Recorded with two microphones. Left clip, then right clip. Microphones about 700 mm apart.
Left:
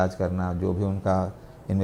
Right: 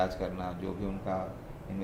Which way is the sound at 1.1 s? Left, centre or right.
Left.